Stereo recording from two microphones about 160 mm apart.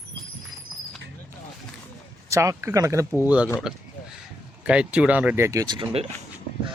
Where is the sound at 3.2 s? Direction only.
10° right (ahead or behind).